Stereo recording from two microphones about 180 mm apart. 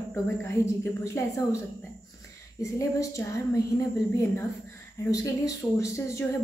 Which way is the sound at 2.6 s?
15° left (ahead or behind).